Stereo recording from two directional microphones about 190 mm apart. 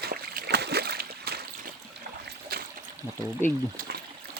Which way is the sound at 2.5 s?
55° right (ahead or behind).